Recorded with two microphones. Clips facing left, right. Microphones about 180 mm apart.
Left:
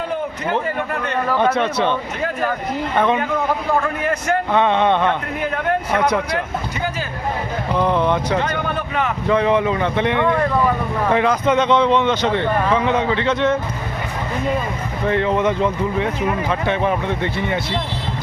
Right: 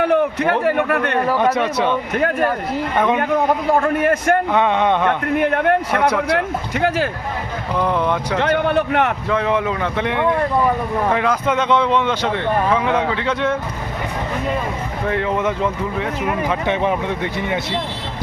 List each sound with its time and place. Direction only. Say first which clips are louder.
0.0 s a man's voice: right 7 dB; 70° right (ahead or behind)
1.3 s speech: left 2 dB; 10° right (ahead or behind)
3.8 s a man's voice: right 4 dB; 55° right (ahead or behind)
4.5 s speech: even; 10° right (ahead or behind)
5.4 s a man's voice: right 5 dB; 60° right (ahead or behind)
6.3 s speech: right 3 dB; 80° right
7.8 s speech: left 1 dB; 5° right (ahead or behind)
8.4 s speech: right 5 dB; 65° right (ahead or behind)
9.3 s speech: left 6 dB; centre (ahead or behind)
15.0 s speech: left 2 dB; 5° right (ahead or behind)
16.4 s speech: right 3 dB; 15° right (ahead or behind)